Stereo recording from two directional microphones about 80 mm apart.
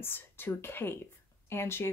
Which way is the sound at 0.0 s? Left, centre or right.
Left.